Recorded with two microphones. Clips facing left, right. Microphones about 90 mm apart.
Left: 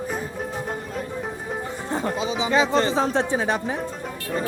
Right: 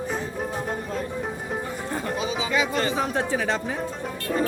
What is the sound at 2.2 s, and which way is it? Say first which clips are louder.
Speech: left 4 dB; 25° left (ahead or behind).